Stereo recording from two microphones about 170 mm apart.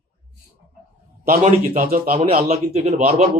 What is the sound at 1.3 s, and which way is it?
Speech, 50° right (ahead or behind).